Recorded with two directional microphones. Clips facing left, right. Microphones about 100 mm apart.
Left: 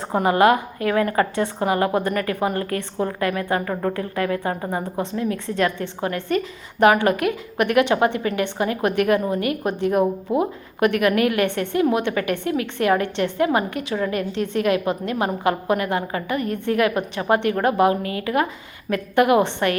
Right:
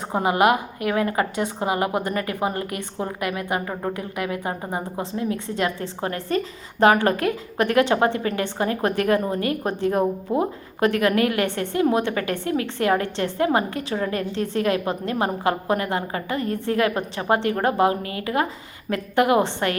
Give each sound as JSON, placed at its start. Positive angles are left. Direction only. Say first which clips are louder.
{"t": 0.1, "sound": "a woman's voice", "louder": "left 2 dB", "side_deg": -20}